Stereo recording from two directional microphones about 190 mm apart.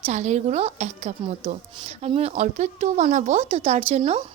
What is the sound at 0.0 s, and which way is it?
Speech, 35° right (ahead or behind).